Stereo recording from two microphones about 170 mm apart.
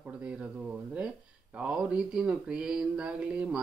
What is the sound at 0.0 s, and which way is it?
Speech, 5° right (ahead or behind).